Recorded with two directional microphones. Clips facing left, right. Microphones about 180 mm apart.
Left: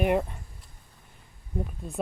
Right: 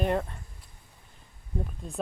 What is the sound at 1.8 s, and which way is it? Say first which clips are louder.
Speech: left 2 dB; 5° left (ahead or behind).